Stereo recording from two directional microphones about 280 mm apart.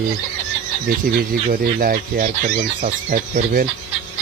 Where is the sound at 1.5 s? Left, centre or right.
Right.